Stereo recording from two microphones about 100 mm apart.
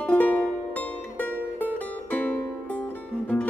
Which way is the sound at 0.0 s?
15° left (ahead or behind).